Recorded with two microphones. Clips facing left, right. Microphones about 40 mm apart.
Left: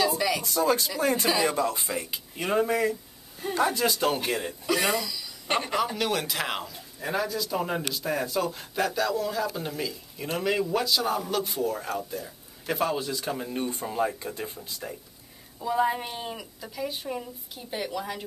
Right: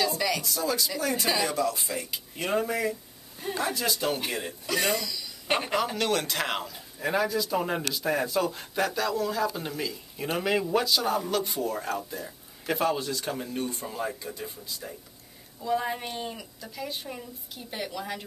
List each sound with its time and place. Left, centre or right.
0.0 s a sound: centre
0.4 s speech: left
2.0 s speech: centre
3.4 s a man's voice: centre
3.7 s speech: left
4.2 s a man's voice: centre
10.1 s a man's voice: centre
13.8 s speech: left
15.6 s a man's voice: centre